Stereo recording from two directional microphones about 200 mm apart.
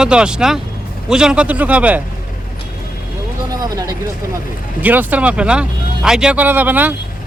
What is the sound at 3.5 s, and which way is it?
Speech, 20° right (ahead or behind).